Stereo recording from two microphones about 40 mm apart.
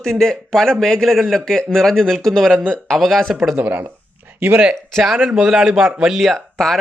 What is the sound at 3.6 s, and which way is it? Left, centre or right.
Speech, right.